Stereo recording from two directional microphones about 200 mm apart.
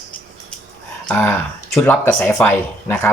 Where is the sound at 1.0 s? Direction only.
10° left (ahead or behind).